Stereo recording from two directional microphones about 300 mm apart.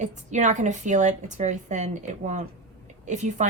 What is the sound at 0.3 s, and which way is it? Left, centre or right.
A woman's voice, right.